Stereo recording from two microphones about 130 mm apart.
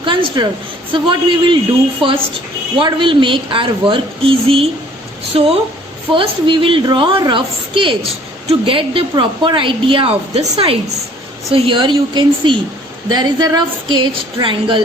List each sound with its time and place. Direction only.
0.0 s a sound: 40° right (ahead or behind)
0.9 s a woman's voice: 40° right (ahead or behind)
11.5 s a woman's voice: 40° right (ahead or behind)